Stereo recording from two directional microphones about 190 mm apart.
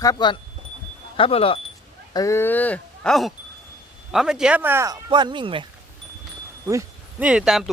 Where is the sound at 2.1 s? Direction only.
15° left (ahead or behind); by 4.9 s 10° right (ahead or behind).